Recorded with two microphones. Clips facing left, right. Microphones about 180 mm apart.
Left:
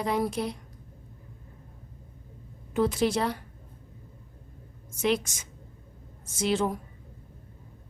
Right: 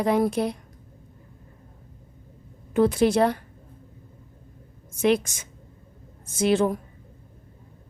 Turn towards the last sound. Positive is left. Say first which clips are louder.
# right 6 dB
turn(degrees=-60)  # may be behind; listen again after turning